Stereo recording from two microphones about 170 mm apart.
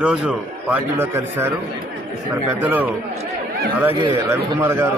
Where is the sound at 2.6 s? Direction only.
10° right (ahead or behind).